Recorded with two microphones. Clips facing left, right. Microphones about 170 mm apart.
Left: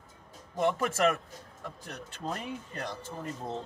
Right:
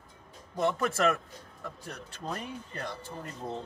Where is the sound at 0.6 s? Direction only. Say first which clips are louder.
Even; 10° left (ahead or behind).